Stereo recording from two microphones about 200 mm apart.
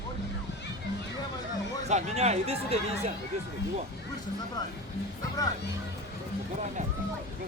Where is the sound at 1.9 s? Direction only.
35° right (ahead or behind).